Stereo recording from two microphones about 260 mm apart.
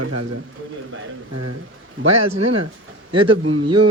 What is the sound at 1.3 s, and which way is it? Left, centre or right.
Speech, right.